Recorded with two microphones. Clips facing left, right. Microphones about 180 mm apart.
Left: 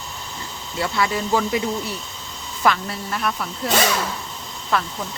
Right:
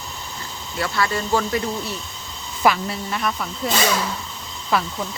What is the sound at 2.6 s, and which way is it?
Speech, 5° right (ahead or behind).